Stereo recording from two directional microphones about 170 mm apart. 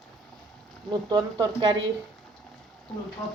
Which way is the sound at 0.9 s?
25° right (ahead or behind).